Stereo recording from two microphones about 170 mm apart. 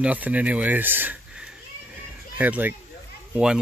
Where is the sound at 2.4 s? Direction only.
10° right (ahead or behind).